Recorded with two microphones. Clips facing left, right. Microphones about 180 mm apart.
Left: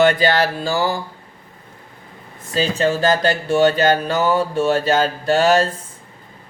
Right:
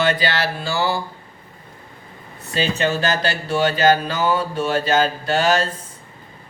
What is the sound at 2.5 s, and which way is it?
Speech, 40° left (ahead or behind).